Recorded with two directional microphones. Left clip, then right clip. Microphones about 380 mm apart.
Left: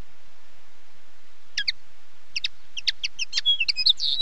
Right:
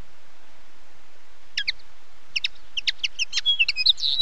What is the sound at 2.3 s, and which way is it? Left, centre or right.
Chicken, centre.